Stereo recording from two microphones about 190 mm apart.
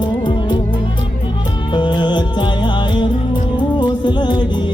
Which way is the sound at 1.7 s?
25° left (ahead or behind).